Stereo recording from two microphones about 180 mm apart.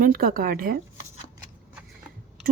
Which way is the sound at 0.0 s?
55° right (ahead or behind).